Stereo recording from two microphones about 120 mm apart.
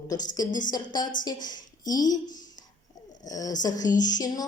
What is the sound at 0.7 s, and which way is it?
Speech, 35° left (ahead or behind).